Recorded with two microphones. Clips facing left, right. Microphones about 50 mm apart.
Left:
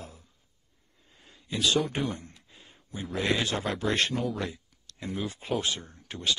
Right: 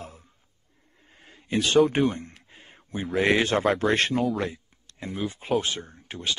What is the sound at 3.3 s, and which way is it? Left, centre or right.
Speech, right.